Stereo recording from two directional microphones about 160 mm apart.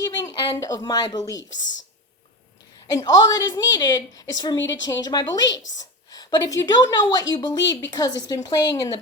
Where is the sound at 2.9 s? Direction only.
25° left (ahead or behind).